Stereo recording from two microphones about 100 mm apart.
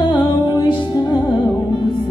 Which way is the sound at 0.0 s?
55° left (ahead or behind).